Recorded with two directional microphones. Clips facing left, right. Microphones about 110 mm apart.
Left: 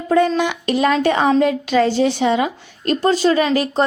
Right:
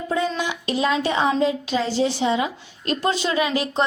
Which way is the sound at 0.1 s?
60° left (ahead or behind).